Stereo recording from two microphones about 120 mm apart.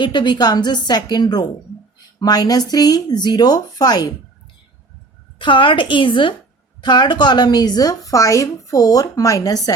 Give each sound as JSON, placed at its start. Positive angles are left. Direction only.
{"t": 0.0, "sound": "speech", "side_deg": 40}
{"t": 5.4, "sound": "a woman's voice", "side_deg": 45}